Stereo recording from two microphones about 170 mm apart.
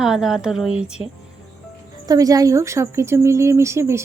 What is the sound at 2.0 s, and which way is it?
A woman's voice, 20° right (ahead or behind).